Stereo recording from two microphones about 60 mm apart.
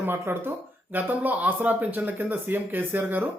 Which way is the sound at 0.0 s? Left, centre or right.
Right.